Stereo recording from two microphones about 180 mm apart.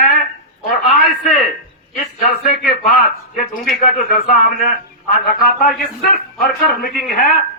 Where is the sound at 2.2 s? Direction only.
55° left (ahead or behind).